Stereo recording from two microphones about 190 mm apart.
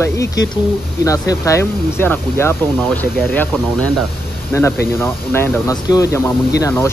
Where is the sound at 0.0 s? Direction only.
15° left (ahead or behind).